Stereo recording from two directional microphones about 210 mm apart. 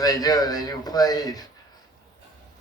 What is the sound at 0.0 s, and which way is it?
Speech, 20° left (ahead or behind).